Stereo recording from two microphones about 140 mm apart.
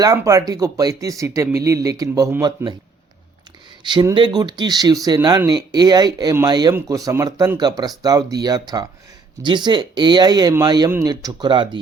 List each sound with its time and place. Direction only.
0.0 s speech: 25° right (ahead or behind)
4.1 s speech: 35° right (ahead or behind)